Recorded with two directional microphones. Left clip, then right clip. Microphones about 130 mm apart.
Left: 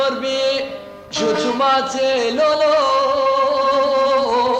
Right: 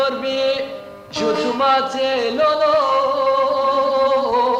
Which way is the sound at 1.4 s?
45° left (ahead or behind).